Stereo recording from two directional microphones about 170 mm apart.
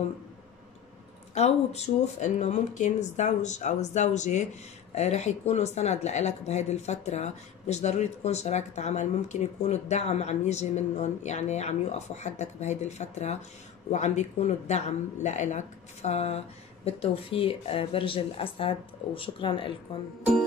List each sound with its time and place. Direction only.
1.3 s speech: 40° left (ahead or behind)